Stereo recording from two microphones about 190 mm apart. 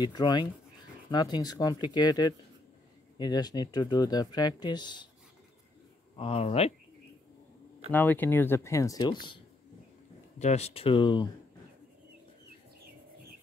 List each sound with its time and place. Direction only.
0.0 s speech: 20° left (ahead or behind)
6.1 s speech: 30° left (ahead or behind)
7.9 s speech: 10° left (ahead or behind)
10.4 s speech: 35° left (ahead or behind)